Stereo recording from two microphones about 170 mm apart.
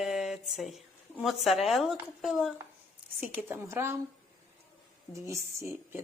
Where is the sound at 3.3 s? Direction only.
10° right (ahead or behind).